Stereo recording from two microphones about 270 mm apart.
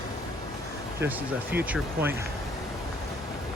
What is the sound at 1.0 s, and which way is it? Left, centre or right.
Speech, centre.